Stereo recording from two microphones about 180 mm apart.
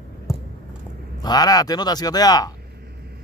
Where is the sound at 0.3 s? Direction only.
15° left (ahead or behind).